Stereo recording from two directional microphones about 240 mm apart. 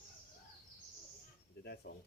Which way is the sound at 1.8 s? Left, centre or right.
Left.